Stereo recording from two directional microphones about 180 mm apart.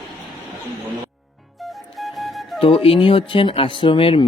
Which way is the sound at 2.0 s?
Centre (ahead or behind).